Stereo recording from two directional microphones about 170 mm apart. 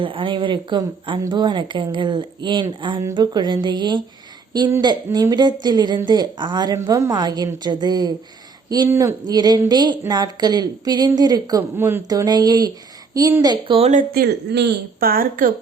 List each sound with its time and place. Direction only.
0.0 s a woman's voice: 30° right (ahead or behind)
5.1 s a woman's voice: 25° right (ahead or behind)
11.6 s a woman's voice: 10° right (ahead or behind); by 14.0 s 35° right (ahead or behind)
14.1 s speech: 65° right (ahead or behind)